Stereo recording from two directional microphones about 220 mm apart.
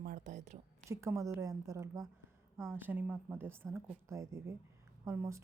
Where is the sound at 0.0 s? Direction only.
35° right (ahead or behind).